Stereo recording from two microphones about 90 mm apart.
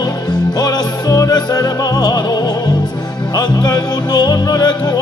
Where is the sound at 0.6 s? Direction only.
45° left (ahead or behind).